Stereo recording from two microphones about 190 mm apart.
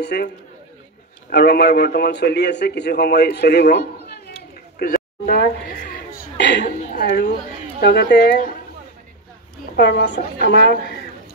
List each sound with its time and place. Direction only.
0.0 s a man's voice: 60° left (ahead or behind)
1.3 s a man's voice: 60° left (ahead or behind)
4.7 s a sound: 55° left (ahead or behind)
6.6 s a woman's voice: 40° left (ahead or behind)
7.8 s a man's voice: 60° left (ahead or behind)
9.8 s a man's voice: 60° left (ahead or behind)